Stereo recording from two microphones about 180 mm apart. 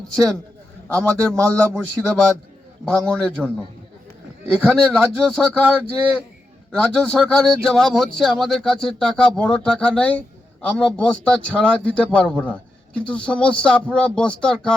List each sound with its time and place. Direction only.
0.9 s speech: 5° left (ahead or behind)
4.7 s speech: 5° left (ahead or behind)